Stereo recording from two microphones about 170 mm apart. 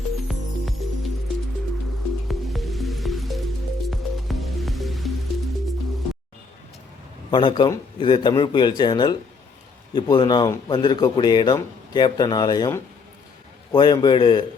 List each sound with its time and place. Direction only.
0.8 s music: centre (ahead or behind)
2.2 s music: centre (ahead or behind)
7.3 s speech: 25° left (ahead or behind)